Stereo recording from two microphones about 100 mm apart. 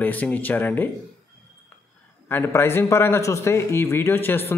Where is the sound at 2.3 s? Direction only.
25° left (ahead or behind).